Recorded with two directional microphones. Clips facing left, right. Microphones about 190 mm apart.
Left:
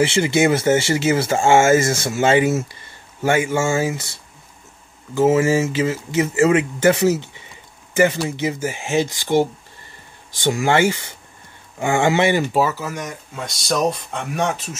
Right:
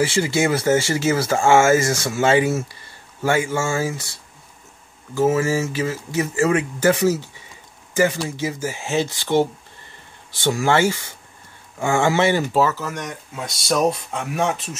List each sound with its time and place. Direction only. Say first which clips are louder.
0.0 s speech: left 3 dB; 20° left (ahead or behind)
5.1 s speech: left 3 dB; 25° left (ahead or behind)
8.4 s speech: left 2 dB; 20° left (ahead or behind); by 14.8 s centre (ahead or behind)